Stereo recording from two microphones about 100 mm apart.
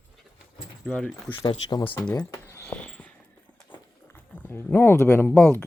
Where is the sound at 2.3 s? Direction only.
30° left (ahead or behind).